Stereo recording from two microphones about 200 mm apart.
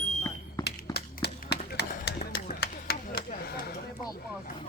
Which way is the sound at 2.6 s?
50° left (ahead or behind).